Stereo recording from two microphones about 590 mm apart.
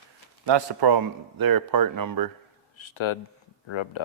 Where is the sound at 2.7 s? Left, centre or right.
Left.